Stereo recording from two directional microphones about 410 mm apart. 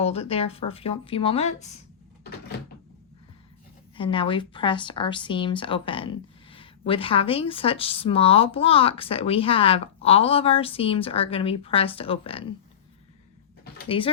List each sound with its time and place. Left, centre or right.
0.0 s a woman's voice: centre
3.9 s a woman's voice: centre
13.8 s a woman's voice: centre